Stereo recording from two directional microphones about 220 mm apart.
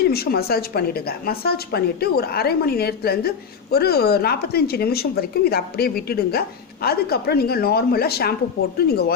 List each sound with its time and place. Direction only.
0.0 s a woman's voice: 45° left (ahead or behind)